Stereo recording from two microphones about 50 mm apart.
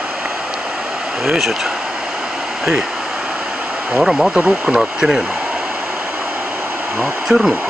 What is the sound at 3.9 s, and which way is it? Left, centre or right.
Speech, centre.